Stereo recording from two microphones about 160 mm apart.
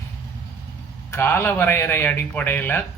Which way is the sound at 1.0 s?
15° left (ahead or behind).